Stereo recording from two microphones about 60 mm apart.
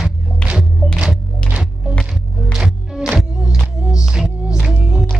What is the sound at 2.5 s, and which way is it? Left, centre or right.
Music, centre.